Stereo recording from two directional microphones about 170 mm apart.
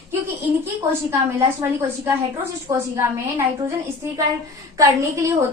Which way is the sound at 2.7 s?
15° right (ahead or behind).